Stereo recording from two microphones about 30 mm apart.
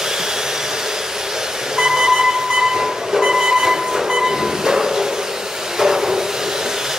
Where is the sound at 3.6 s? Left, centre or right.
Centre.